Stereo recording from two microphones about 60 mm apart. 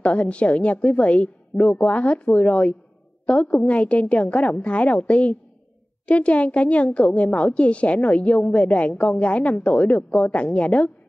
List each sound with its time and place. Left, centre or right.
0.0 s a woman's voice: left